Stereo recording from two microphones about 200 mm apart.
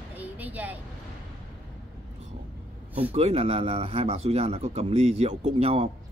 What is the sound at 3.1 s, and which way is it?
Speech, 30° right (ahead or behind).